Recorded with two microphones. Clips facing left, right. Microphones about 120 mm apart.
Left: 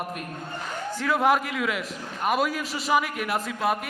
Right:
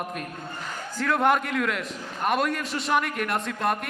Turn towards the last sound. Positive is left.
turn(degrees=5)  # may be behind; listen again after turning